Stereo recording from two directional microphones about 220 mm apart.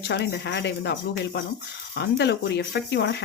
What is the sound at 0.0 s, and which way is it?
Speech, 50° left (ahead or behind).